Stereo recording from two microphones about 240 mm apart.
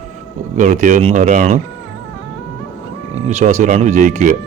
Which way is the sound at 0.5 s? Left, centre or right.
Right.